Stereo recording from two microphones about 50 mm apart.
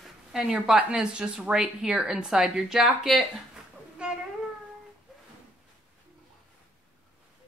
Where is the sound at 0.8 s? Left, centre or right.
Right; by 3.2 s centre.